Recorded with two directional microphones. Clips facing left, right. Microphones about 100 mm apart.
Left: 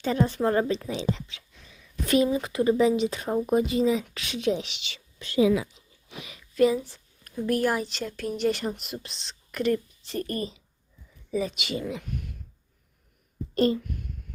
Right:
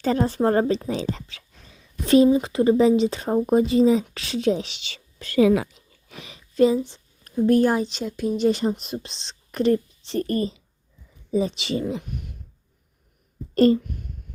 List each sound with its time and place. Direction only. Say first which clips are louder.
0.0 s a woman's voice: right 4 dB; 40° right (ahead or behind); by 5.6 s 55° right (ahead or behind)
6.1 s a woman's voice: even; 35° right (ahead or behind)
13.6 s a woman's voice: right 6 dB; 40° right (ahead or behind)